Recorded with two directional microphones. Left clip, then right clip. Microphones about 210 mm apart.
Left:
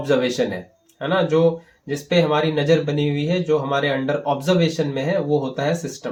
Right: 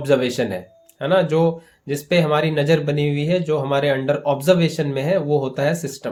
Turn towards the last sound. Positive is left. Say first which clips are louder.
# right 2 dB
turn(degrees=-40)  # may be behind; listen again after turning